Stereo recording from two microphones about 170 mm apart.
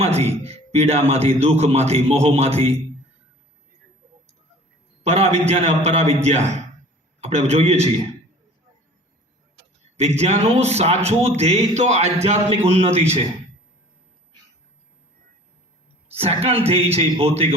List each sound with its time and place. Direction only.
0.0 s a man's voice: 35° right (ahead or behind)
5.0 s a man's voice: 40° right (ahead or behind)
10.0 s a man's voice: 40° right (ahead or behind)
16.1 s a man's voice: 35° right (ahead or behind)